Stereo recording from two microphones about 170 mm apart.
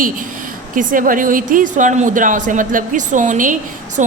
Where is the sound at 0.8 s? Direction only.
50° right (ahead or behind).